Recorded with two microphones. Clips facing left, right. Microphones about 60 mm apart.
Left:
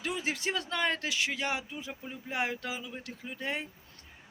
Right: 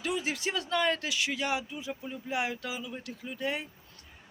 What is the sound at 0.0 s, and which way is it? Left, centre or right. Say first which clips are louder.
Speech: right 1 dB; left.